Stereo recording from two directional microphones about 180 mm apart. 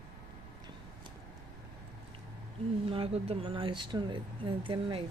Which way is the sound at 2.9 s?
30° right (ahead or behind).